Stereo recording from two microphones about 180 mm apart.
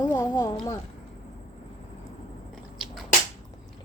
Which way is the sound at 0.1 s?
20° left (ahead or behind).